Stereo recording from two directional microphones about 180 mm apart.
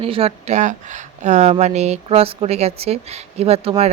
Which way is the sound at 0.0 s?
30° right (ahead or behind).